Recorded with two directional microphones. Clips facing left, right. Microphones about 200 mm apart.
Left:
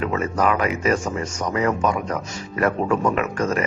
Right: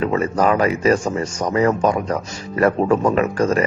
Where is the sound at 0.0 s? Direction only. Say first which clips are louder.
Right 4 dB; 35° right (ahead or behind).